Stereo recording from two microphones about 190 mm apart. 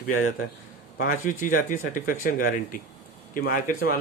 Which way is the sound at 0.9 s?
50° left (ahead or behind).